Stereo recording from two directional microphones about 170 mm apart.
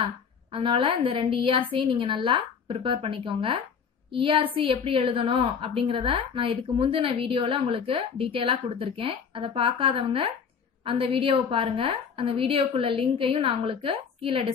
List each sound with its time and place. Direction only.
0.5 s a woman's voice: 30° right (ahead or behind)